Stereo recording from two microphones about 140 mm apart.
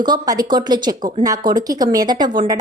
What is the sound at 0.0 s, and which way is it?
Speech, 30° right (ahead or behind).